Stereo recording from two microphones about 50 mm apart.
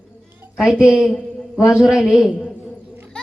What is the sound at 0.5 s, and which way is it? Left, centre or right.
A woman's voice, centre.